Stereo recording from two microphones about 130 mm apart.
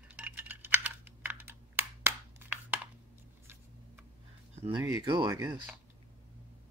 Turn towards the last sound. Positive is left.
turn(degrees=-30)  # may be behind; listen again after turning